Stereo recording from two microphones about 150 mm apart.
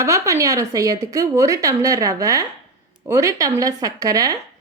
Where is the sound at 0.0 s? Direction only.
20° right (ahead or behind).